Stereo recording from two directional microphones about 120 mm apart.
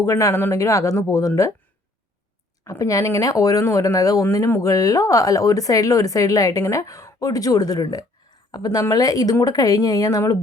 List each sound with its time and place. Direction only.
0.0 s speech: 25° left (ahead or behind)
2.6 s speech: 25° left (ahead or behind)